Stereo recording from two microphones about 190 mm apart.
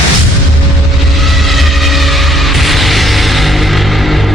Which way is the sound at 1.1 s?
Centre (ahead or behind).